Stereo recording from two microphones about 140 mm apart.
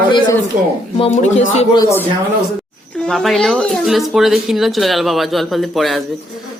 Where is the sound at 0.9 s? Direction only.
50° left (ahead or behind).